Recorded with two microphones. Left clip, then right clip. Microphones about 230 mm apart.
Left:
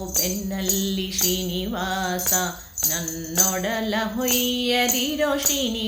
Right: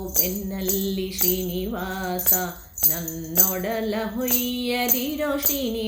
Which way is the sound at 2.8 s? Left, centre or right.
Centre.